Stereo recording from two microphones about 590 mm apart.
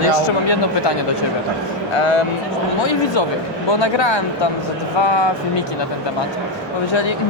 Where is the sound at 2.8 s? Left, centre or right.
Left.